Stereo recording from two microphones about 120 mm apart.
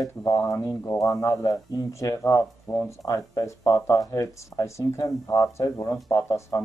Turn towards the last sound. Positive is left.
turn(degrees=25)  # may be behind; listen again after turning